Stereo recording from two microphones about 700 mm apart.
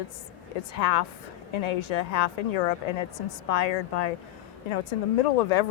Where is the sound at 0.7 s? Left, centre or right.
Left.